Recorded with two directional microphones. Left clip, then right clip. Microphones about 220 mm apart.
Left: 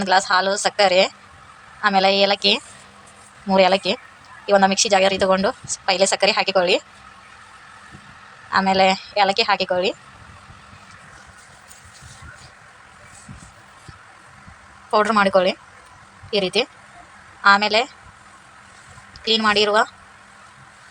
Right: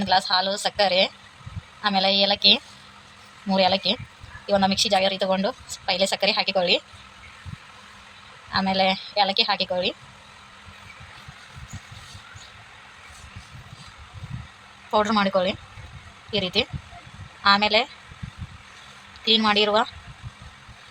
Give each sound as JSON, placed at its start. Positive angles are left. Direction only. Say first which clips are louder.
{"t": 0.0, "sound": "speech", "louder": "left 4 dB", "side_deg": 15}
{"t": 8.4, "sound": "speech", "louder": "left 6 dB", "side_deg": 15}
{"t": 14.8, "sound": "speech", "louder": "left 5 dB", "side_deg": 15}
{"t": 19.3, "sound": "speech", "louder": "left 2 dB", "side_deg": 10}